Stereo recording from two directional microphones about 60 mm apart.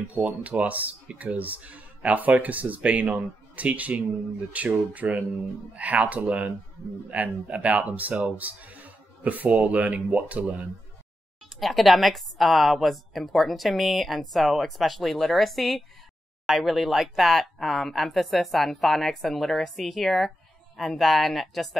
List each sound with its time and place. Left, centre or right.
0.1 s speech: right
11.6 s speech: centre